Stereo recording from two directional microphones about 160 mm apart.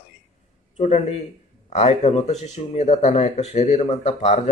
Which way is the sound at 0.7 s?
40° left (ahead or behind).